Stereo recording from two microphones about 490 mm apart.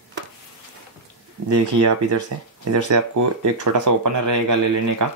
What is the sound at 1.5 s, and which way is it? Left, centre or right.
Speech, right.